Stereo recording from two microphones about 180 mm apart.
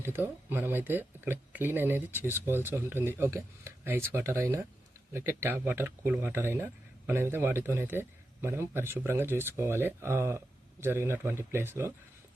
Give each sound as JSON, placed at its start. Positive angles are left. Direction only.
{"t": 0.0, "sound": "a man's voice", "side_deg": -10}